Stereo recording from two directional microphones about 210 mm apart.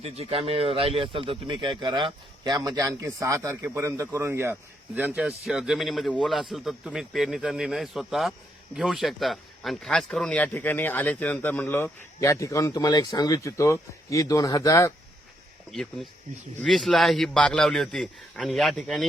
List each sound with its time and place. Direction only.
0.0 s a man's voice: 30° right (ahead or behind); by 14.9 s 15° left (ahead or behind)
15.7 s a man's voice: centre (ahead or behind)